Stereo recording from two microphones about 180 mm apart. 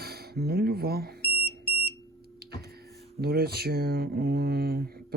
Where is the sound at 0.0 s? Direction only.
60° right (ahead or behind).